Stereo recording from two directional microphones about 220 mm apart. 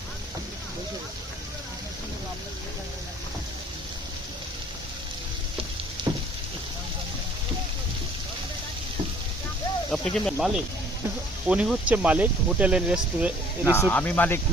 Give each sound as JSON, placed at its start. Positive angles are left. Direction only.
{"t": 6.1, "sound": "a sound", "side_deg": -20}
{"t": 9.9, "sound": "speech", "side_deg": 5}
{"t": 13.7, "sound": "speech", "side_deg": 5}